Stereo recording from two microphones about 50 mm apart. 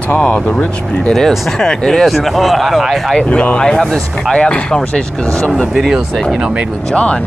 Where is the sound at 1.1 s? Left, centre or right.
Centre.